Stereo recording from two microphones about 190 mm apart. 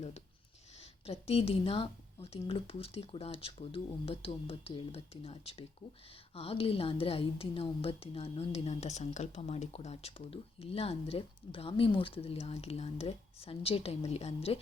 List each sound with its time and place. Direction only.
0.8 s a woman's voice: 30° left (ahead or behind)